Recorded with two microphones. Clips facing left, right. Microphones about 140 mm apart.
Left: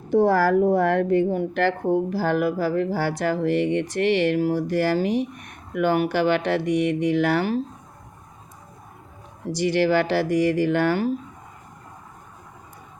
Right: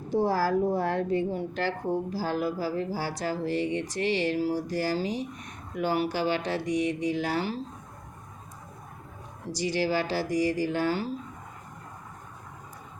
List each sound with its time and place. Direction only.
0.1 s a woman's voice: 60° left (ahead or behind)
9.5 s a woman's voice: 60° left (ahead or behind)